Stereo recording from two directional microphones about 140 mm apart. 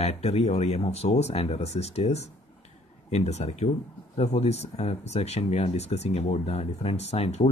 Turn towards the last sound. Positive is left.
turn(degrees=50)  # may be behind; listen again after turning